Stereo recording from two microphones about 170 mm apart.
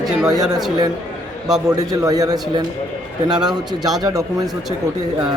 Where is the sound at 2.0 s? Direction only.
20° right (ahead or behind).